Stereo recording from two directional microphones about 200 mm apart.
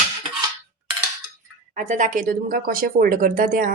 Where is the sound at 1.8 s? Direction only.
40° right (ahead or behind).